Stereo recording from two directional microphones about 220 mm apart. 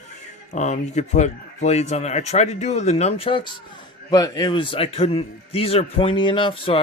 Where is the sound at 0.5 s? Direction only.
30° left (ahead or behind).